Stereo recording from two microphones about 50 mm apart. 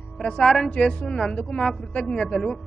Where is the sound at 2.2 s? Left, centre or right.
Centre.